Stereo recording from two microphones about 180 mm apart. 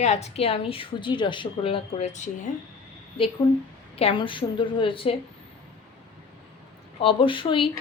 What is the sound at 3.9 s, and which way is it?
Speech, 30° left (ahead or behind).